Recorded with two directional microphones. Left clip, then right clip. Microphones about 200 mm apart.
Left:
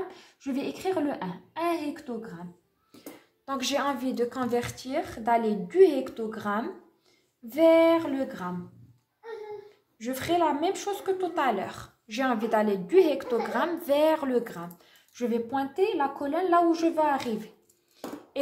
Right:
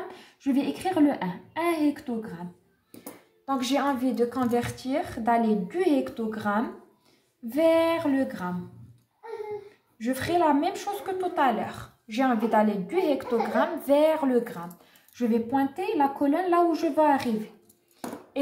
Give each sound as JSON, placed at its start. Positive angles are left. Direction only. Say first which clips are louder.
{"t": 0.1, "sound": "speech", "louder": "right 6 dB", "side_deg": 20}
{"t": 3.4, "sound": "a woman's voice", "louder": "right 2 dB", "side_deg": 40}
{"t": 9.9, "sound": "a woman's voice", "louder": "right 1 dB", "side_deg": 30}